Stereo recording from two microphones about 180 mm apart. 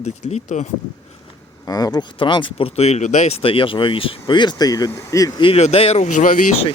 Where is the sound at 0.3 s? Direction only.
40° left (ahead or behind).